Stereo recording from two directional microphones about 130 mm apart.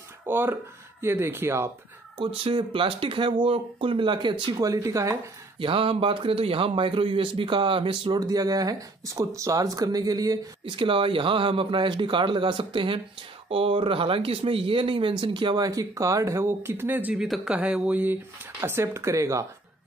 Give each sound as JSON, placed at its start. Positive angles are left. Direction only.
{"t": 0.3, "sound": "speech", "side_deg": -15}
{"t": 2.1, "sound": "a man's voice", "side_deg": -45}
{"t": 5.6, "sound": "a man's voice", "side_deg": -40}
{"t": 10.6, "sound": "a man's voice", "side_deg": -40}